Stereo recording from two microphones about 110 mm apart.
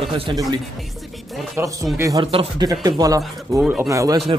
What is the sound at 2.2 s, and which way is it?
Speech, 55° right (ahead or behind).